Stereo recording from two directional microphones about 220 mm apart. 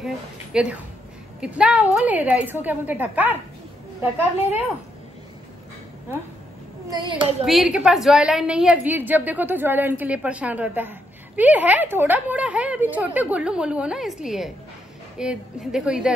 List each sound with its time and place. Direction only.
0.0 s a woman's voice: 5° right (ahead or behind)
6.9 s a child's voice: 20° right (ahead or behind)
7.4 s a woman's voice: centre (ahead or behind)